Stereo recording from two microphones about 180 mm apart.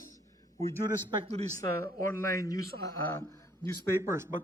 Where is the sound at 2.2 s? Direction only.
15° left (ahead or behind).